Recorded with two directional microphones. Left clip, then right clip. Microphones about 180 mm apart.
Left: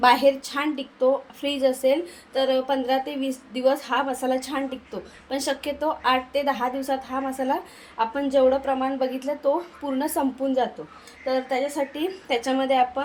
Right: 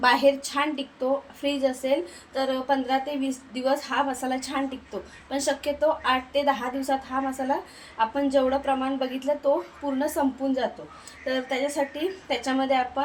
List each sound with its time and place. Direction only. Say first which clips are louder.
0.0 s a woman's voice: left 2 dB; 35° left (ahead or behind)